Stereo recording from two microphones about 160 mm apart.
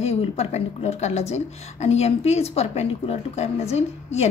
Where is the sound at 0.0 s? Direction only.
40° left (ahead or behind).